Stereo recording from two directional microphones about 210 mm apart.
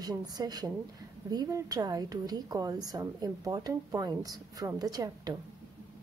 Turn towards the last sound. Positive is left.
turn(degrees=-20)  # may be behind; listen again after turning